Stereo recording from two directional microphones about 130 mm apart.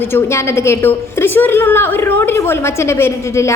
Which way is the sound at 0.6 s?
20° left (ahead or behind).